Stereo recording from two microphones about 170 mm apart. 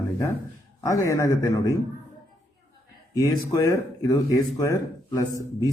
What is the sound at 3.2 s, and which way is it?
Speech, 20° left (ahead or behind).